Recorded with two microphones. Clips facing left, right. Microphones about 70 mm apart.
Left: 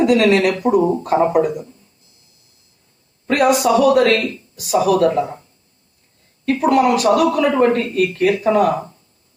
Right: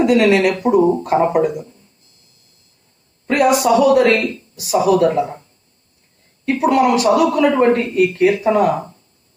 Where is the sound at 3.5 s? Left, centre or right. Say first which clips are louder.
Right 1 dB; right.